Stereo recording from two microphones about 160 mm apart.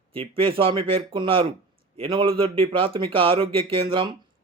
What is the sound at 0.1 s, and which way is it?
Speech, 35° right (ahead or behind).